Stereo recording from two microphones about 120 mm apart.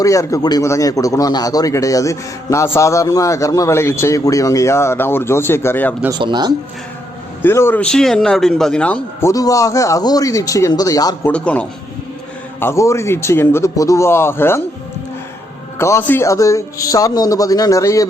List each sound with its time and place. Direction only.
0.0 s a man's voice: 25° left (ahead or behind)
6.1 s a man's voice: 40° right (ahead or behind)
7.4 s a man's voice: 20° left (ahead or behind)
7.9 s speech: 5° left (ahead or behind)
9.2 s a man's voice: 30° left (ahead or behind)
11.3 s a man's voice: 10° left (ahead or behind)
12.5 s a man's voice: 20° left (ahead or behind)
15.8 s a man's voice: 20° left (ahead or behind)